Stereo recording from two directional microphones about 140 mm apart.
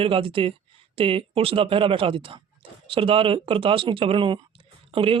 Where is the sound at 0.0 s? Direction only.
40° right (ahead or behind).